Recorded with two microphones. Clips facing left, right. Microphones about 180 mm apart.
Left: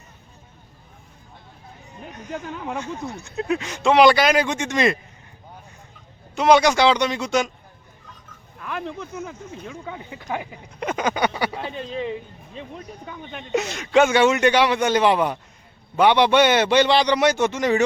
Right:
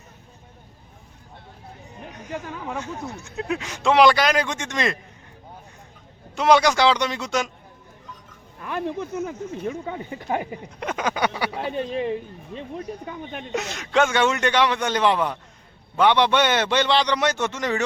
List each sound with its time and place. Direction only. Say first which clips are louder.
2.7 s speech: left 2 dB; 5° right (ahead or behind)
6.3 s speech: left 2 dB; centre (ahead or behind)
9.2 s speech: right 6 dB; 40° right (ahead or behind)
10.8 s speech: left 2 dB; centre (ahead or behind)
11.7 s speech: right 3 dB; 50° right (ahead or behind)
13.5 s a man's voice: left 5 dB; centre (ahead or behind)